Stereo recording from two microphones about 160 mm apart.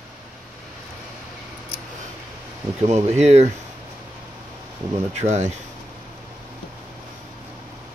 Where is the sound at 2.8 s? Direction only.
45° right (ahead or behind).